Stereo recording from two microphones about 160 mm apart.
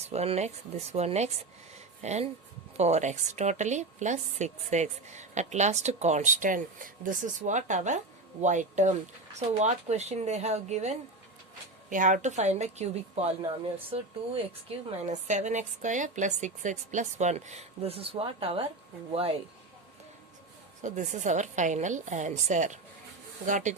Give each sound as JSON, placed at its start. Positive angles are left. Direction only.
{"t": 0.0, "sound": "a woman's voice", "side_deg": -40}
{"t": 11.9, "sound": "a woman's voice", "side_deg": -55}
{"t": 20.8, "sound": "a woman's voice", "side_deg": -50}